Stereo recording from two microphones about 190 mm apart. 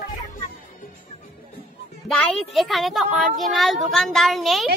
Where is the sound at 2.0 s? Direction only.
Centre (ahead or behind).